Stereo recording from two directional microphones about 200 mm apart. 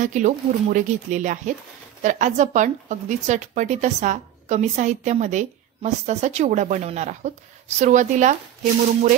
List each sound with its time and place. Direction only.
0.0 s a woman's voice: 40° right (ahead or behind)